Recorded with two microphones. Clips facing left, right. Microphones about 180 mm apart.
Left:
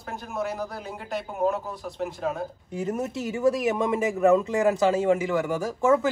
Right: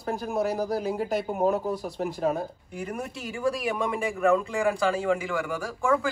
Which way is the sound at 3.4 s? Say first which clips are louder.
Left 4 dB; 20° left (ahead or behind).